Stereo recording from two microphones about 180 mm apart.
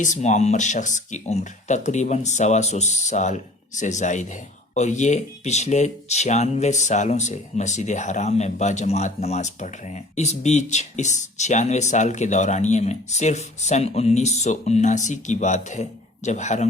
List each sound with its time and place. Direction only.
0.0 s speech: 40° left (ahead or behind)